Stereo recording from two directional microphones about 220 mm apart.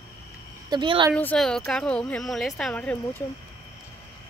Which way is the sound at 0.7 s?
20° right (ahead or behind).